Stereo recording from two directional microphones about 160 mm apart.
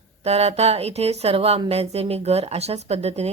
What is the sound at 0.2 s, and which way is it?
Speech, 40° right (ahead or behind).